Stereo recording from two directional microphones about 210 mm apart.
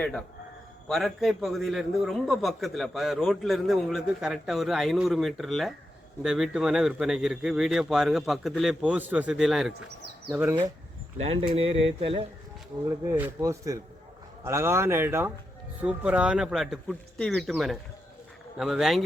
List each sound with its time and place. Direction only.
0.9 s a man's voice: centre (ahead or behind)
11.2 s speech: 25° right (ahead or behind)
13.1 s a man's voice: 10° right (ahead or behind)